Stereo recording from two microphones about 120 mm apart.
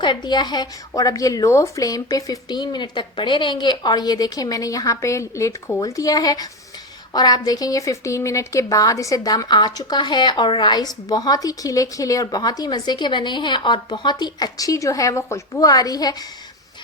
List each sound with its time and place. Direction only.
0.0 s speech: 40° left (ahead or behind)